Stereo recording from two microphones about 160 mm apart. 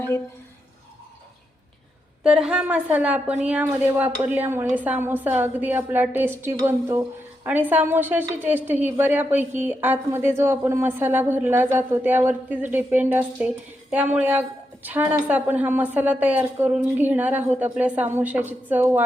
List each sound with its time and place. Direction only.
2.2 s a woman's voice: 5° right (ahead or behind)